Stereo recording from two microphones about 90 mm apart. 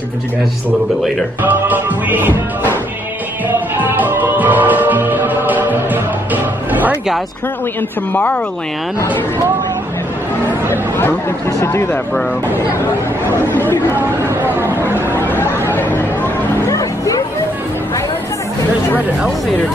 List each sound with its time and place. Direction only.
1.4 s music: 20° right (ahead or behind)
8.1 s a woman's voice: 20° left (ahead or behind)
11.6 s speech: 30° left (ahead or behind)
13.5 s a woman's voice: 20° left (ahead or behind)
13.9 s speech: 20° right (ahead or behind)
15.1 s chatter: 20° left (ahead or behind)
15.7 s a sound: 20° left (ahead or behind)
16.6 s music: 40° left (ahead or behind)